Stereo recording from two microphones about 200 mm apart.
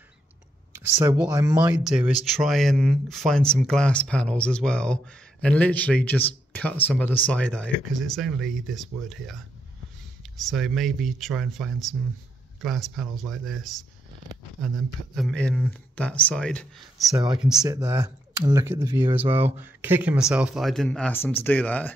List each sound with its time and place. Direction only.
0.7 s speech: 10° right (ahead or behind)
1.9 s speech: 5° right (ahead or behind)
17.1 s speech: 20° right (ahead or behind)
17.4 s speech: centre (ahead or behind)
17.6 s speech: 15° right (ahead or behind)
19.3 s speech: 10° right (ahead or behind); by 21.9 s 10° left (ahead or behind)